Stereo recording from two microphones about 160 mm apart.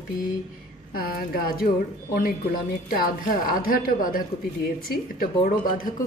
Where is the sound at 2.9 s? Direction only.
60° left (ahead or behind).